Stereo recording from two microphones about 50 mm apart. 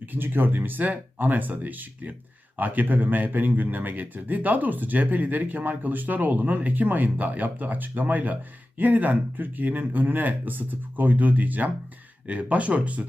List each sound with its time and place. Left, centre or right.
0.0 s a man's voice: right